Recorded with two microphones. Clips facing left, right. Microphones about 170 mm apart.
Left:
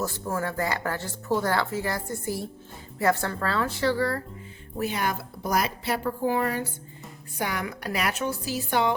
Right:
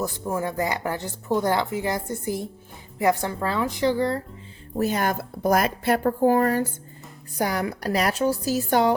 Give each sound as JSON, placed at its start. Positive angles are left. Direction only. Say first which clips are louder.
{"t": 0.0, "sound": "a woman's voice", "louder": "right 2 dB", "side_deg": -15}
{"t": 4.8, "sound": "a woman's voice", "louder": "right 5 dB", "side_deg": -45}